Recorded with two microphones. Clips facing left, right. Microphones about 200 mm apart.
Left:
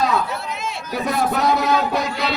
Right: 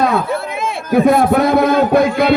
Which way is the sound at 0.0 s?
55° right (ahead or behind).